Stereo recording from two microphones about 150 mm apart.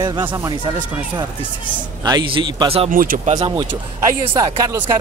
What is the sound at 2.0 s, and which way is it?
Speech, 30° right (ahead or behind).